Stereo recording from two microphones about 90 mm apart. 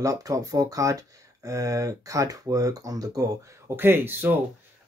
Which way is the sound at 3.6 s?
25° right (ahead or behind).